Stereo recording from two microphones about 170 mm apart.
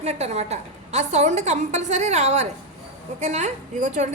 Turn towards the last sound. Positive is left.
turn(degrees=-45)  # may be behind; listen again after turning